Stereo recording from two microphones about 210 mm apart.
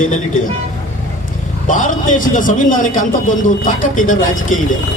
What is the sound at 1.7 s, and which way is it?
A man's voice, 35° left (ahead or behind).